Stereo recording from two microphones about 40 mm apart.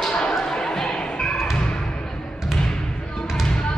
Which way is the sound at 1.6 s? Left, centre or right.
Centre.